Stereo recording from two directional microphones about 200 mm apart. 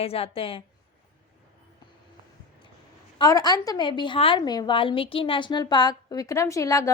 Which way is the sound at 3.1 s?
20° left (ahead or behind).